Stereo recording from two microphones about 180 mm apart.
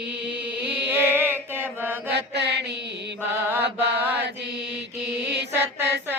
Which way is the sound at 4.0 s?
10° right (ahead or behind).